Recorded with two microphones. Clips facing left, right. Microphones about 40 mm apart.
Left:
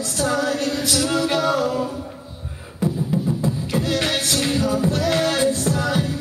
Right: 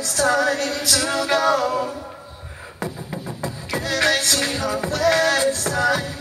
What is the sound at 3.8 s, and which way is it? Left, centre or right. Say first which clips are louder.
Music: right 5 dB; centre.